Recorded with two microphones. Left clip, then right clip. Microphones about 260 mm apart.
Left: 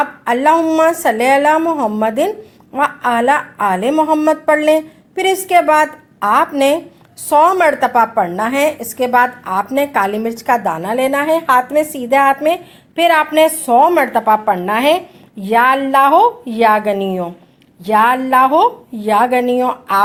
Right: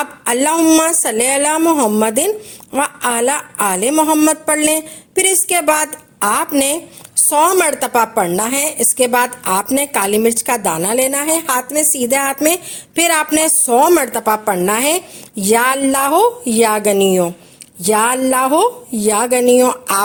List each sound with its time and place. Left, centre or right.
0.0 s a woman's voice: right